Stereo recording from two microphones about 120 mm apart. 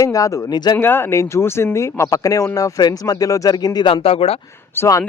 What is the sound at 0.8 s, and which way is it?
Speech, 20° left (ahead or behind).